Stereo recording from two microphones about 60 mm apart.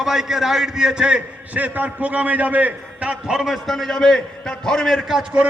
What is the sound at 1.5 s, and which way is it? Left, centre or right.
A man's voice, right.